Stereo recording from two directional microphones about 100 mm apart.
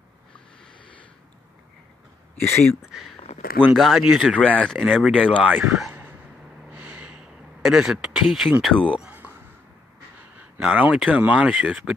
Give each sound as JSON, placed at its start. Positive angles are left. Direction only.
{"t": 2.4, "sound": "speech", "side_deg": 25}
{"t": 2.8, "sound": "speech", "side_deg": -5}
{"t": 4.9, "sound": "speech", "side_deg": -5}
{"t": 5.9, "sound": "a sound", "side_deg": -20}
{"t": 6.7, "sound": "snort", "side_deg": -20}
{"t": 7.6, "sound": "speech", "side_deg": -5}
{"t": 8.6, "sound": "speech", "side_deg": 10}
{"t": 9.0, "sound": "a sound", "side_deg": -15}
{"t": 10.6, "sound": "speech", "side_deg": -10}